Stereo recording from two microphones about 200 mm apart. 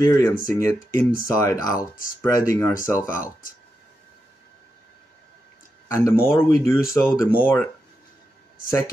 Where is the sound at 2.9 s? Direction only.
5° left (ahead or behind).